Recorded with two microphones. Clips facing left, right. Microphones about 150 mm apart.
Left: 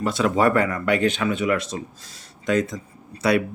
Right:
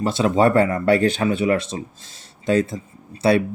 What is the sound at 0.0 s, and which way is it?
Speech, 25° right (ahead or behind).